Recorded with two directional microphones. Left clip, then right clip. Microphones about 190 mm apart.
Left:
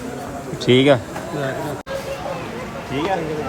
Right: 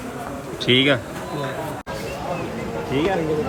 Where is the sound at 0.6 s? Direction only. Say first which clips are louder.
Left 3 dB; 25° left (ahead or behind).